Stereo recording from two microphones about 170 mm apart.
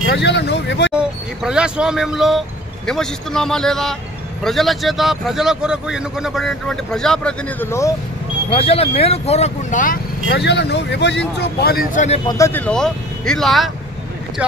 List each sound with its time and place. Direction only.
0.0 s speech: 75° left (ahead or behind)
0.9 s speech: 5° right (ahead or behind); by 7.9 s 15° left (ahead or behind)
8.5 s speech: 35° left (ahead or behind)
10.2 s speech: 85° left; by 12.2 s 50° left (ahead or behind)
12.3 s speech: 15° left (ahead or behind); by 13.7 s centre (ahead or behind)